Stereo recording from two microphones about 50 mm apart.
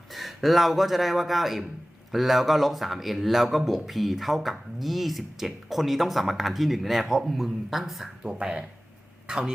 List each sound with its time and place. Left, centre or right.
0.1 s speech: centre
8.2 s speech: centre